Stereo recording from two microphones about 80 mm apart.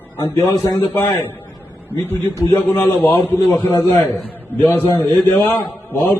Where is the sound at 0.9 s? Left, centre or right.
Left.